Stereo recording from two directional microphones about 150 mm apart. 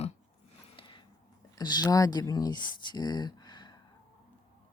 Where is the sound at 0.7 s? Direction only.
35° left (ahead or behind).